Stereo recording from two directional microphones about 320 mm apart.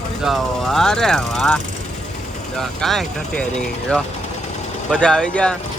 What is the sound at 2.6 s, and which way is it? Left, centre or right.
Speech, centre.